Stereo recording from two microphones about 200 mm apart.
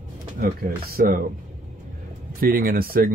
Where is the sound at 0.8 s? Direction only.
50° right (ahead or behind).